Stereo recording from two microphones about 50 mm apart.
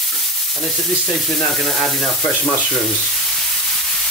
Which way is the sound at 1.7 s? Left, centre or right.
Centre.